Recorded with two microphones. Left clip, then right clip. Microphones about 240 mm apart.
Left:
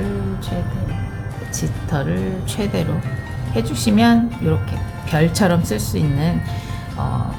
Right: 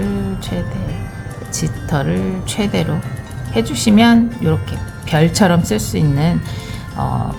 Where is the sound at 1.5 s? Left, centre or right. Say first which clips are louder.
Right 4 dB; right.